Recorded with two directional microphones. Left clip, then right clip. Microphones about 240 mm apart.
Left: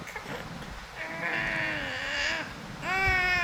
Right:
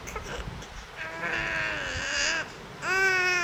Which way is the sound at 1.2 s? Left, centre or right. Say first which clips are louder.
Right 1 dB; centre.